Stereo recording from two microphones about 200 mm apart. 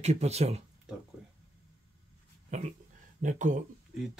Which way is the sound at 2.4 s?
35° right (ahead or behind).